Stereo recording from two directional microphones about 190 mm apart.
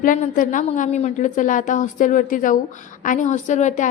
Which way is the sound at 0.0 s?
45° left (ahead or behind).